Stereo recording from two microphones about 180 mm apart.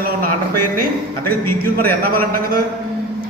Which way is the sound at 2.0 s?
55° right (ahead or behind).